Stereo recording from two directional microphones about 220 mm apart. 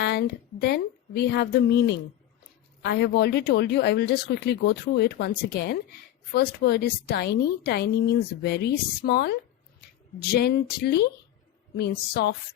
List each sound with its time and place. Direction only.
0.0 s a woman's voice: 50° left (ahead or behind)
10.3 s a woman's voice: 50° left (ahead or behind)